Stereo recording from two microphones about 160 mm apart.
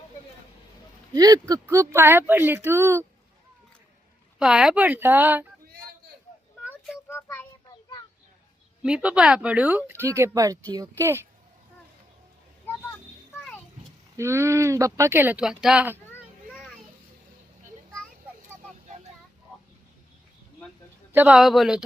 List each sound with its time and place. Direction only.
1.1 s speech: 25° right (ahead or behind)
4.4 s speech: 5° right (ahead or behind)
7.1 s child singing: 15° left (ahead or behind)
8.8 s speech: 5° right (ahead or behind)
14.2 s speech: 15° right (ahead or behind)
16.0 s children playing: 10° left (ahead or behind)
21.1 s a man's voice: 10° right (ahead or behind)